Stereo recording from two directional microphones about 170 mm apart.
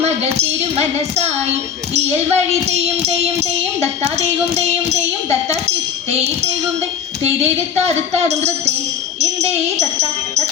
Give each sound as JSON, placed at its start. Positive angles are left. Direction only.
{"t": 0.0, "sound": "music", "side_deg": -40}
{"t": 9.2, "sound": "jingle bell", "side_deg": -40}